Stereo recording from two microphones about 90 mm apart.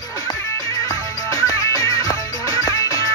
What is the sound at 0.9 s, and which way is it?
Music, 35° left (ahead or behind).